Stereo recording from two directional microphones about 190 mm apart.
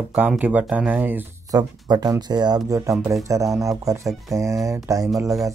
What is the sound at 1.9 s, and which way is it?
Speech, 20° right (ahead or behind).